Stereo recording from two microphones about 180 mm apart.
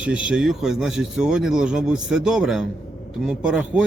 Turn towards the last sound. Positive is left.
turn(degrees=-5)  # may be behind; listen again after turning